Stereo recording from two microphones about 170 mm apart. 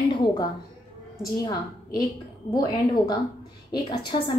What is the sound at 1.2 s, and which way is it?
A woman's voice, 20° left (ahead or behind).